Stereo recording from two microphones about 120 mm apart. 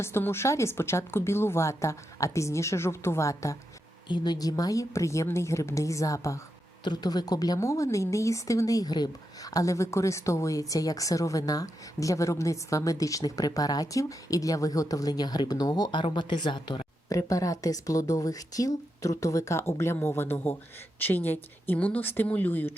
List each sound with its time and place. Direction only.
0.0 s a woman's voice: 20° left (ahead or behind)
4.1 s a woman's voice: 35° left (ahead or behind)
6.8 s a woman's voice: 35° left (ahead or behind); by 22.7 s 15° left (ahead or behind)